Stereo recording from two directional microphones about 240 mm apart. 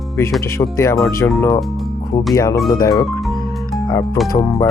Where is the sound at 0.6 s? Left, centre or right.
Centre.